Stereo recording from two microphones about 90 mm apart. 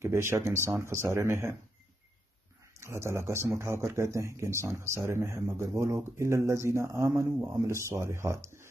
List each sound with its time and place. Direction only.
0.0 s speech: 30° right (ahead or behind)
2.7 s a man's voice: 30° right (ahead or behind)